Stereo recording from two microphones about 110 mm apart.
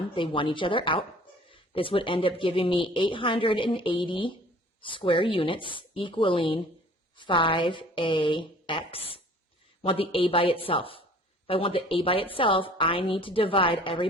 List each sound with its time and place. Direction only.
0.1 s a woman's voice: 50° left (ahead or behind)